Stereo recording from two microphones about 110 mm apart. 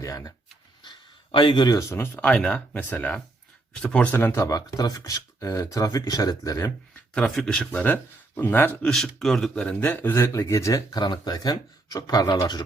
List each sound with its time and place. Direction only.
0.0 s speech: 30° left (ahead or behind)
0.8 s a sound: 45° left (ahead or behind)
2.1 s speech: 10° left (ahead or behind)
4.1 s speech: 20° left (ahead or behind)
7.1 s speech: 5° left (ahead or behind)
8.9 s speech: 5° left (ahead or behind); by 12.6 s 40° left (ahead or behind)